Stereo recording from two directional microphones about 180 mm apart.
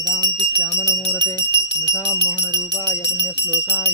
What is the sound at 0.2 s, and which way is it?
Jingle bell, 25° right (ahead or behind).